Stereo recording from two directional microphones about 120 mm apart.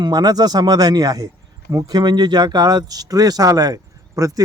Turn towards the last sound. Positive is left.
turn(degrees=-30)  # may be behind; listen again after turning